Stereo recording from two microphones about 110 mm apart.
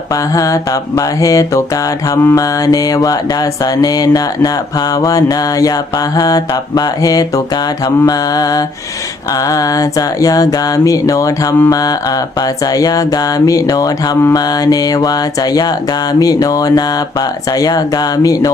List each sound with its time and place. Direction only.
0.1 s mantra: 30° left (ahead or behind)